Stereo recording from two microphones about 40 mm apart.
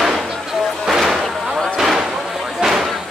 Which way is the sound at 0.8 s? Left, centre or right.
Centre.